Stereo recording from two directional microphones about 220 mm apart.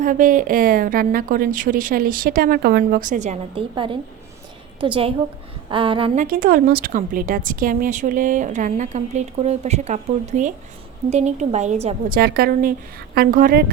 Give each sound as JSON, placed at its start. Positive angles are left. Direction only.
{"t": 0.0, "sound": "a woman's voice", "side_deg": -40}
{"t": 6.1, "sound": "a woman's voice", "side_deg": -40}
{"t": 12.1, "sound": "a woman's voice", "side_deg": -40}